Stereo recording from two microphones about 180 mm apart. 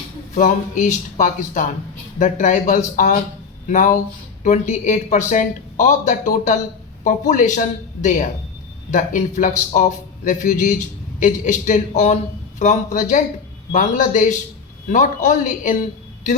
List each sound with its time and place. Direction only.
0.3 s speech: 45° left (ahead or behind)
8.9 s speech: 45° left (ahead or behind)